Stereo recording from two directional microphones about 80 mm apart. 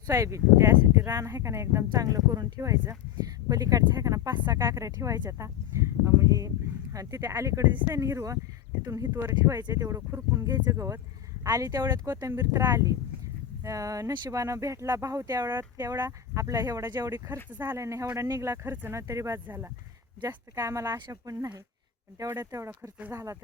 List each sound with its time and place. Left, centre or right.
0.1 s speech: right
1.9 s speech: right
3.2 s speech: right
5.4 s speech: right
9.4 s speech: right
12.0 s speech: right
15.4 s speech: right
15.9 s speech: right
17.6 s speech: right
19.5 s speech: right
20.2 s speech: right